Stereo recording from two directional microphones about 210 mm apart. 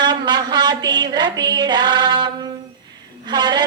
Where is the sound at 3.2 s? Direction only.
20° right (ahead or behind).